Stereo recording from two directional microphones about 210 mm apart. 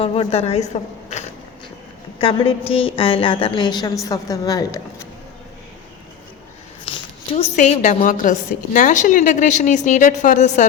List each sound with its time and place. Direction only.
0.0 s a woman's voice: 30° left (ahead or behind)
2.2 s a woman's voice: 25° left (ahead or behind)
6.8 s a sound: 25° left (ahead or behind)
7.5 s a woman's voice: 35° left (ahead or behind)